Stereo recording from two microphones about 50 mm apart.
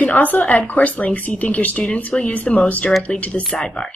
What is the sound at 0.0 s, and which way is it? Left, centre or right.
Speech, left.